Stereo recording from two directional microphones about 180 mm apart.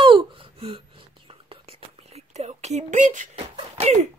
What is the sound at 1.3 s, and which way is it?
Whispering, 30° right (ahead or behind).